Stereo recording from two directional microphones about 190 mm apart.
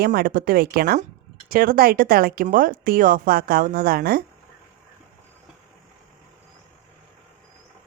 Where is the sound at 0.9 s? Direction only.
45° right (ahead or behind).